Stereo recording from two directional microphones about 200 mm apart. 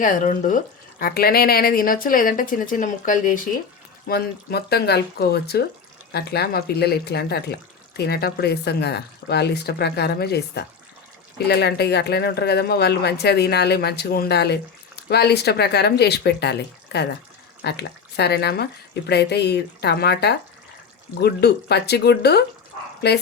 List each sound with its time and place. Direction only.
0.0 s speech: 40° left (ahead or behind)
4.1 s speech: 55° left (ahead or behind)